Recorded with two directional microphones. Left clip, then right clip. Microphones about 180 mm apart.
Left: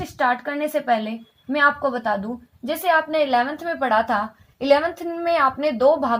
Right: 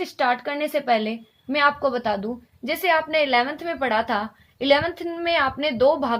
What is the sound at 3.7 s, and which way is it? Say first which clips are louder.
Speech: left 3 dB; 25° right (ahead or behind).